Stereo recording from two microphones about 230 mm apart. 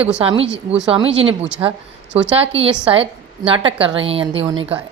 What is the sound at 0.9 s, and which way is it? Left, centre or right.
A woman's voice, right.